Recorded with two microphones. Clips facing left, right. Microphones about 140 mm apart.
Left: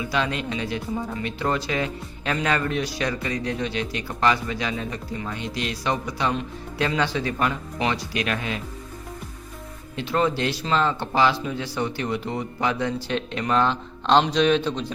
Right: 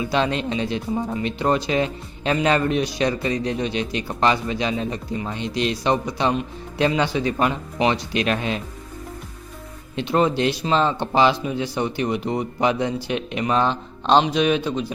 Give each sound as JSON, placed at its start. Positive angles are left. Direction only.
{"t": 0.0, "sound": "speech", "side_deg": -30}
{"t": 9.9, "sound": "speech", "side_deg": -20}